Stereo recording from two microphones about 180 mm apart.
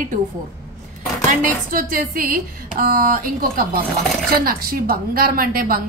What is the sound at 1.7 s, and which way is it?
A woman's voice, 50° right (ahead or behind).